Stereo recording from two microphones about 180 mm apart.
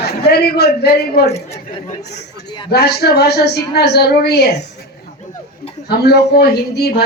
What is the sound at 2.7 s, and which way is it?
Speech, 65° left (ahead or behind).